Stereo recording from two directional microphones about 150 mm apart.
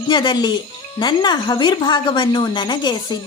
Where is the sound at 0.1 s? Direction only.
30° left (ahead or behind).